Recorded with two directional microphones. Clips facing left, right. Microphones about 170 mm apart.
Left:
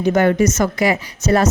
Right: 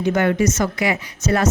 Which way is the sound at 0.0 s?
40° left (ahead or behind).